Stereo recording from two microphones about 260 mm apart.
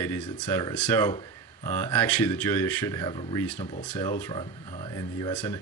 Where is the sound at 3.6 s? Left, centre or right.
Left.